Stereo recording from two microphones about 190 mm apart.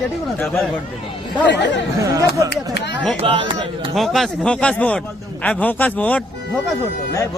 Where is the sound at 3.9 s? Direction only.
Centre (ahead or behind).